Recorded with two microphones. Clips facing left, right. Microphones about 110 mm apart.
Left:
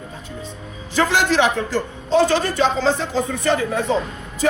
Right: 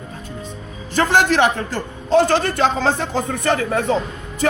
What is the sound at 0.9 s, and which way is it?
A man's voice, 50° right (ahead or behind).